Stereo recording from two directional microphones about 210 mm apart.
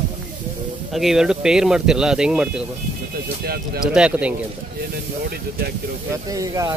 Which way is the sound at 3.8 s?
5° right (ahead or behind).